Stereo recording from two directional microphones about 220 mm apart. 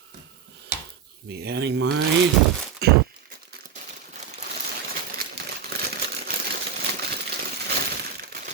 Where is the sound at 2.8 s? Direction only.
45° right (ahead or behind).